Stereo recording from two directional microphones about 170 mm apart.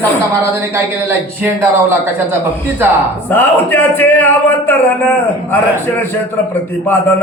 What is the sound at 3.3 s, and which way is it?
Speech, 10° left (ahead or behind).